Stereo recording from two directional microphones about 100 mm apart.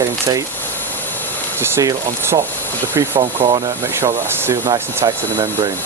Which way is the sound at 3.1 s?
60° right (ahead or behind).